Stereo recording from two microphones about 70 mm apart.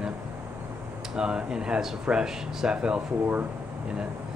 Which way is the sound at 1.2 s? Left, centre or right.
Centre.